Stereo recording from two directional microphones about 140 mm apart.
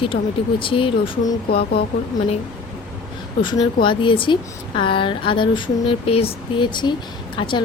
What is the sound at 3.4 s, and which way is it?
Speech, 35° left (ahead or behind).